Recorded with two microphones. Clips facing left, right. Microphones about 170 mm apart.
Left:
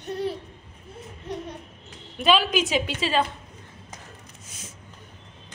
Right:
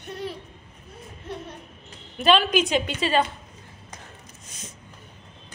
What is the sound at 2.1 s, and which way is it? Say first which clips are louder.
A woman's voice: right 2 dB; 5° left (ahead or behind).